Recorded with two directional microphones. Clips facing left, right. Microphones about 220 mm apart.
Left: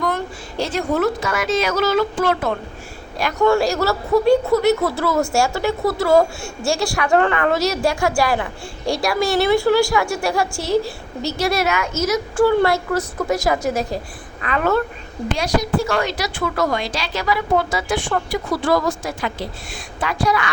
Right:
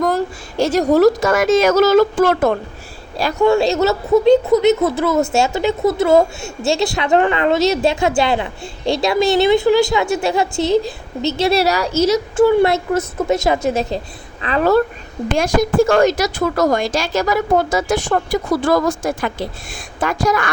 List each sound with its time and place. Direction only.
0.6 s speech: 40° right (ahead or behind)
3.4 s a woman's voice: 20° right (ahead or behind)
15.4 s speech: 50° right (ahead or behind)